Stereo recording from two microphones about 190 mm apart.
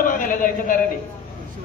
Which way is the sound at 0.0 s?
45° left (ahead or behind).